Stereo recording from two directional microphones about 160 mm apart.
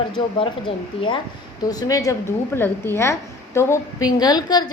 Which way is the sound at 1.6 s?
20° left (ahead or behind).